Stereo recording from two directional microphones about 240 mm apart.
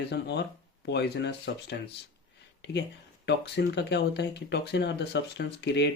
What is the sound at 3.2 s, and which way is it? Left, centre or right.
Speech, left.